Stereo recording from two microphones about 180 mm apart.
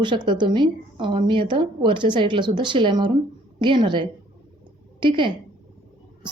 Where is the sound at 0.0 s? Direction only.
25° right (ahead or behind).